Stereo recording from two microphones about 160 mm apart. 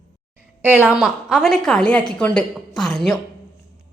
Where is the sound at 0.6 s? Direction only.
10° right (ahead or behind).